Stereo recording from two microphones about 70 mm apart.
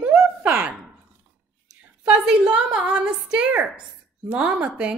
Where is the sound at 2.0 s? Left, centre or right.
Centre.